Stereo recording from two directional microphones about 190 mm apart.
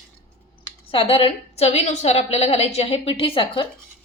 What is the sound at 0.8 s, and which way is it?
A woman's voice, 30° left (ahead or behind).